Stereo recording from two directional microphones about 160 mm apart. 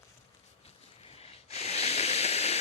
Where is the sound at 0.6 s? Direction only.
40° left (ahead or behind).